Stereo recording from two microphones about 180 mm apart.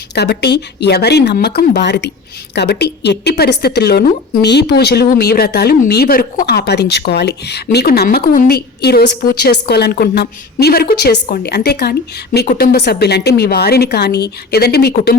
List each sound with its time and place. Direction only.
0.1 s a woman's voice: 65° left (ahead or behind)